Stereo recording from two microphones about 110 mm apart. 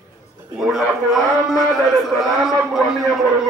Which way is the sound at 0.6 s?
Centre (ahead or behind).